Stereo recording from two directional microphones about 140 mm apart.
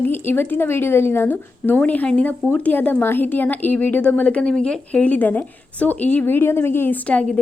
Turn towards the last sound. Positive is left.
turn(degrees=10)  # may be behind; listen again after turning